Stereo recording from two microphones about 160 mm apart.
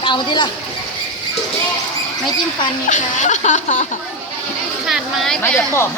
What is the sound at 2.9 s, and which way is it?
Speech, 50° left (ahead or behind).